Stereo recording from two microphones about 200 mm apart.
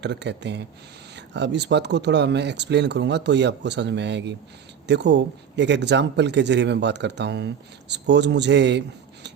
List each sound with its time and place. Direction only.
0.0 s speech: 60° right (ahead or behind)